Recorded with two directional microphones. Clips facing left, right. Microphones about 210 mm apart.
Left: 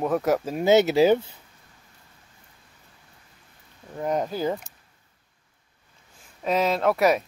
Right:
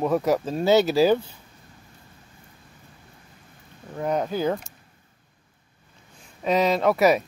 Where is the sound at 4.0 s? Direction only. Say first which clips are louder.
Right 1 dB; centre (ahead or behind).